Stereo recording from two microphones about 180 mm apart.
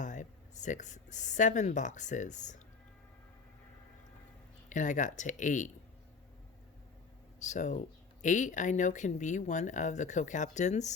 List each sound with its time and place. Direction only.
0.0 s speech: 45° left (ahead or behind)
4.7 s speech: 45° left (ahead or behind)
7.3 s speech: 40° left (ahead or behind)